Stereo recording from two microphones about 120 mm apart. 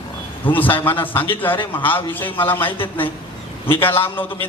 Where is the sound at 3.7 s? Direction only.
20° left (ahead or behind).